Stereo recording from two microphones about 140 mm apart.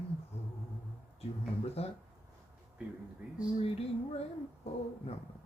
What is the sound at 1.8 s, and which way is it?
Speech, 45° left (ahead or behind).